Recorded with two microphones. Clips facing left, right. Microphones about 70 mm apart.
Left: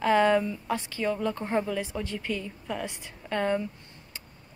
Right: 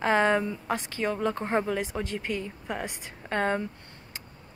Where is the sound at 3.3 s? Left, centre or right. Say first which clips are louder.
Even; right.